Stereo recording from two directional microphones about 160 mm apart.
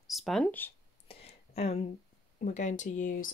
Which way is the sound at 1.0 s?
40° left (ahead or behind).